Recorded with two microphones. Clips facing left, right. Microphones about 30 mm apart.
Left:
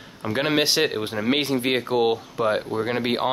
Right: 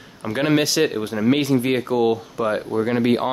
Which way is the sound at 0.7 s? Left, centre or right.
Left.